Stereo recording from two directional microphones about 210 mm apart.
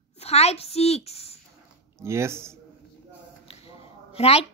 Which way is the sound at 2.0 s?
10° right (ahead or behind).